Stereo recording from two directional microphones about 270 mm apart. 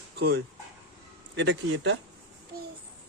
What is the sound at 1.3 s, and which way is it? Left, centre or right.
Speech, right.